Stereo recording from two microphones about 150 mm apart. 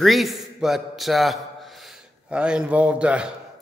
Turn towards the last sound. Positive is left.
turn(degrees=-5)  # may be behind; listen again after turning